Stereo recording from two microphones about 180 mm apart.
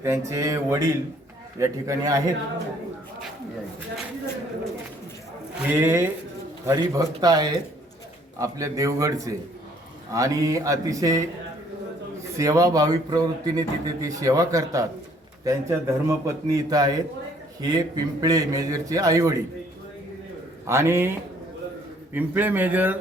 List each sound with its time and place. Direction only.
0.0 s a man's voice: 15° right (ahead or behind)
5.8 s a man's voice: 15° right (ahead or behind)
12.4 s a man's voice: 20° right (ahead or behind)
20.7 s a man's voice: 15° right (ahead or behind)